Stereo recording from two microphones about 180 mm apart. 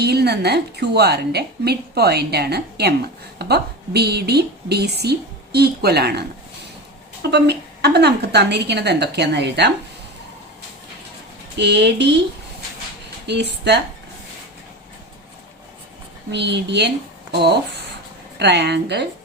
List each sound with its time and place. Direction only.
0.0 s a woman's voice: 65° right (ahead or behind)
11.5 s a woman's voice: 70° right (ahead or behind)
13.2 s a woman's voice: 70° right (ahead or behind)
16.3 s a woman's voice: 70° right (ahead or behind)